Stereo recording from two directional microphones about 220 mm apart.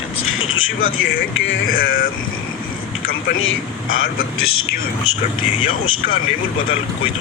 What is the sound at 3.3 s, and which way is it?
Speech, 65° left (ahead or behind).